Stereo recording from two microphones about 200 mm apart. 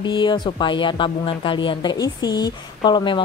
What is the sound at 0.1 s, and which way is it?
Speech, 25° left (ahead or behind).